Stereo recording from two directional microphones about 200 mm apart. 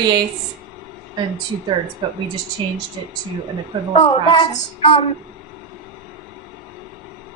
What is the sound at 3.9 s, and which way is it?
A woman's voice, 25° left (ahead or behind).